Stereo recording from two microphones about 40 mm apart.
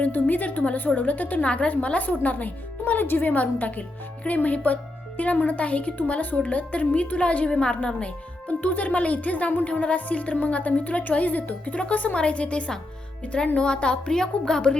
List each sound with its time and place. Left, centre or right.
0.0 s a woman's voice: left
3.0 s a woman's voice: left
8.4 s speech: left
9.6 s speech: left
11.9 s a woman's voice: left